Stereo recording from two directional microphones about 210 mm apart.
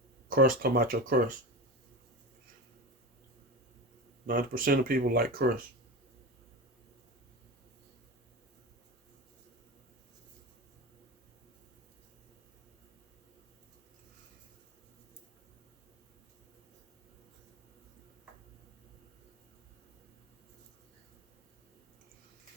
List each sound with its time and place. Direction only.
0.3 s speech: 45° right (ahead or behind)
4.3 s speech: 45° right (ahead or behind)